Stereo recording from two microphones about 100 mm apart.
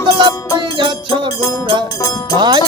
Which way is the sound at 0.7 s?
50° right (ahead or behind).